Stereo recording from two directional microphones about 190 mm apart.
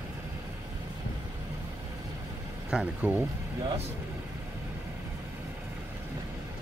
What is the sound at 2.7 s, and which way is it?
Speech, 5° right (ahead or behind).